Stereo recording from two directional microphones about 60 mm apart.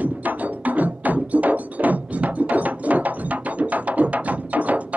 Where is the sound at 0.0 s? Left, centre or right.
Right.